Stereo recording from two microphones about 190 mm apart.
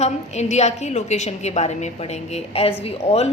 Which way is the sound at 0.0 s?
35° left (ahead or behind).